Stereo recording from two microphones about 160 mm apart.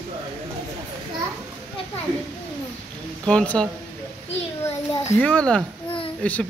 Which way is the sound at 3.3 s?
5° left (ahead or behind).